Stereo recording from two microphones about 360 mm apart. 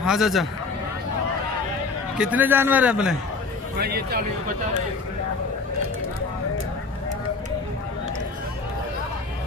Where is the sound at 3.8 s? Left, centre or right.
Right.